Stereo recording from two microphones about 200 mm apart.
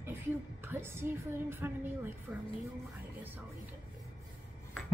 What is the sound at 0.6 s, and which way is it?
A woman's voice, 10° right (ahead or behind).